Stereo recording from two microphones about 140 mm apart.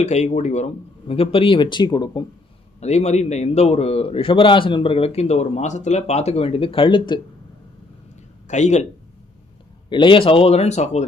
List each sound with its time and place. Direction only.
0.0 s a man's voice: 55° left (ahead or behind); by 2.2 s 30° left (ahead or behind)
2.8 s a man's voice: 50° left (ahead or behind); by 7.2 s 35° left (ahead or behind)
8.4 s speech: 55° left (ahead or behind)
9.9 s a man's voice: 35° left (ahead or behind); by 11.0 s 55° left (ahead or behind)